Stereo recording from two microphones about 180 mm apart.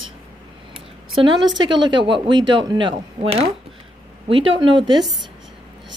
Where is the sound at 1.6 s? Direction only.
25° right (ahead or behind).